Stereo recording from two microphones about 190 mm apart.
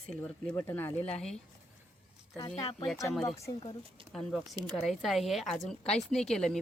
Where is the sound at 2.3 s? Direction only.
20° left (ahead or behind).